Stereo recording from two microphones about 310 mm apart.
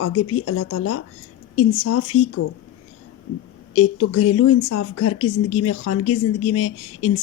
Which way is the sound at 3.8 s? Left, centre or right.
Left.